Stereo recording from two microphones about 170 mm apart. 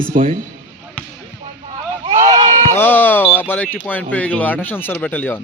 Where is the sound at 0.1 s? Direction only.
35° right (ahead or behind).